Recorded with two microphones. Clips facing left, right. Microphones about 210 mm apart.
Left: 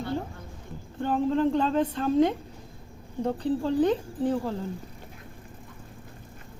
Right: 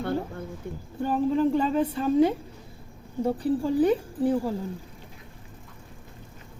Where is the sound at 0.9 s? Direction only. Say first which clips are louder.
Right 1 dB; 5° right (ahead or behind).